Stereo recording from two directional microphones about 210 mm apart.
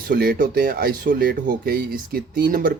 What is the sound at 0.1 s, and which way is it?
Speech, 45° right (ahead or behind).